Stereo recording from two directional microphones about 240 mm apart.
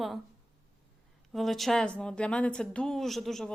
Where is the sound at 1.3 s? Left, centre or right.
Centre.